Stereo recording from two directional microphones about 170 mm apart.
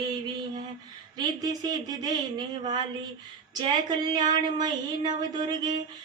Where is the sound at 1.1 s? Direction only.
25° right (ahead or behind).